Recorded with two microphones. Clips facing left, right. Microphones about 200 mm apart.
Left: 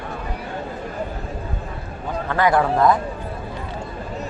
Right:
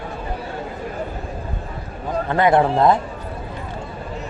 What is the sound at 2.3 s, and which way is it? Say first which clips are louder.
Speech: right 2 dB; 25° right (ahead or behind).